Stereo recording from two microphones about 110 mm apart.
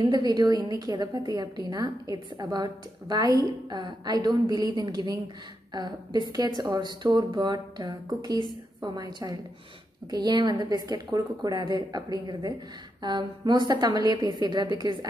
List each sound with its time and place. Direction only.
0.0 s a woman's voice: 40° right (ahead or behind)